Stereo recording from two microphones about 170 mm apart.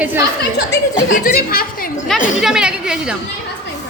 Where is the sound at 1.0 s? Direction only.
55° left (ahead or behind).